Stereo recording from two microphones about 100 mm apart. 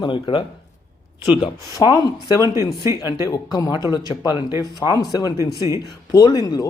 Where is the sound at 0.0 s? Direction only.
55° left (ahead or behind).